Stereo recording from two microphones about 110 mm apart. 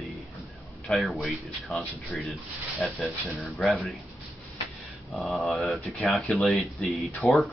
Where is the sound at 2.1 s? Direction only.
Centre (ahead or behind).